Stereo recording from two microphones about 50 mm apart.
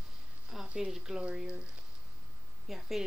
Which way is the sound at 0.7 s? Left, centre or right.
Centre.